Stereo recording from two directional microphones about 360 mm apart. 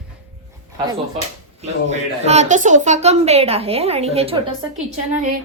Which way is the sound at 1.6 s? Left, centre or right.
Centre.